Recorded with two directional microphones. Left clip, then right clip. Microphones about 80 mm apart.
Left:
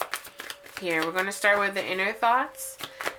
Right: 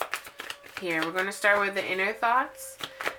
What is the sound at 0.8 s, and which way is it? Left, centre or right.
Speech, left.